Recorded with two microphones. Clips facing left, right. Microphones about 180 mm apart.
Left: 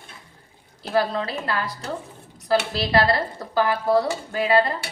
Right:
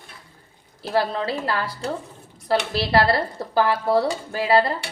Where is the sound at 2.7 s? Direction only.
30° right (ahead or behind).